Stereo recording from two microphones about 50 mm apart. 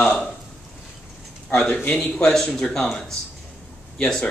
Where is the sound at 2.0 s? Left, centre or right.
Centre.